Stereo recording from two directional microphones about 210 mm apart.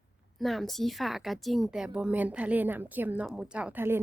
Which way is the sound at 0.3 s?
Centre (ahead or behind).